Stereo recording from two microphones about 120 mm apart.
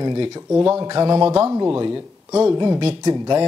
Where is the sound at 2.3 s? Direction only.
20° right (ahead or behind).